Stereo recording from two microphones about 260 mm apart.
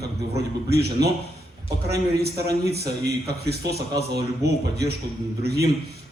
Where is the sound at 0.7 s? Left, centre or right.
Right.